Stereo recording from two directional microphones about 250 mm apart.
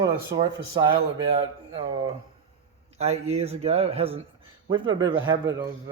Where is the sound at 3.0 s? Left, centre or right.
Right.